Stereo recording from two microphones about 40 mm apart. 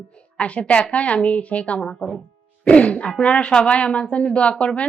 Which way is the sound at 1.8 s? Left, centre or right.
Centre.